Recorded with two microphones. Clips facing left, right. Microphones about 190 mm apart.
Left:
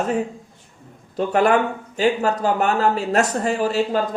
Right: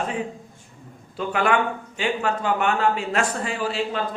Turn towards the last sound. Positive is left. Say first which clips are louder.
# left 6 dB
turn(degrees=40)  # may be behind; listen again after turning